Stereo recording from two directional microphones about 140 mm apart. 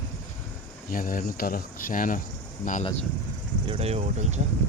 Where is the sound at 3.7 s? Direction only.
45° right (ahead or behind).